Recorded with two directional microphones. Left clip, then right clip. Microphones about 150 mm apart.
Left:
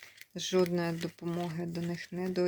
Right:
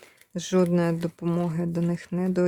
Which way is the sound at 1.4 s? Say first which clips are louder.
Right 7 dB; 35° right (ahead or behind).